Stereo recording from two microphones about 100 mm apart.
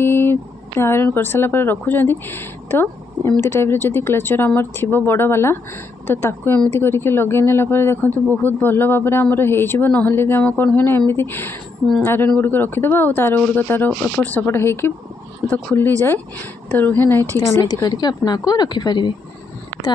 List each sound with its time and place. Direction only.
0.0 s speech: 25° left (ahead or behind)
17.8 s speech: 45° left (ahead or behind)